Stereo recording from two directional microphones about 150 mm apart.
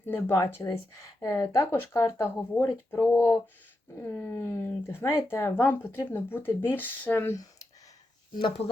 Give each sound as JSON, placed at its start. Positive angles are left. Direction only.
{"t": 0.0, "sound": "speech", "side_deg": 15}
{"t": 8.4, "sound": "speech", "side_deg": 35}